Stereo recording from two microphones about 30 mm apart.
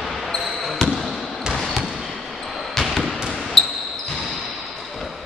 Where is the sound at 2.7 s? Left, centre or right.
Centre.